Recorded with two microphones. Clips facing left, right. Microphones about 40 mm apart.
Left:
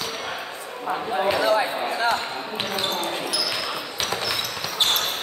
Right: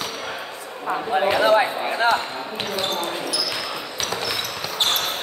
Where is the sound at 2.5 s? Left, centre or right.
Centre.